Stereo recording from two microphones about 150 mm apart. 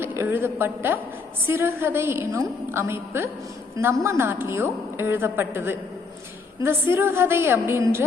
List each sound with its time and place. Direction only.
0.0 s a woman's voice: 15° right (ahead or behind)